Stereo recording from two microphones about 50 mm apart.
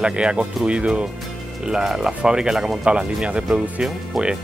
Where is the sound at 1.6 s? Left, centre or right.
Centre.